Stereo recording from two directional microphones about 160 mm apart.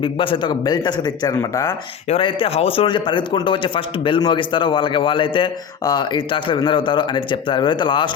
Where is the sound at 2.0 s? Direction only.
35° left (ahead or behind).